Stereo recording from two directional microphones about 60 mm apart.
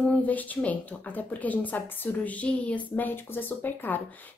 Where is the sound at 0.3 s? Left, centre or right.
Left.